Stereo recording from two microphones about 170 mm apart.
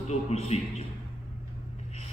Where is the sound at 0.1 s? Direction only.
40° left (ahead or behind).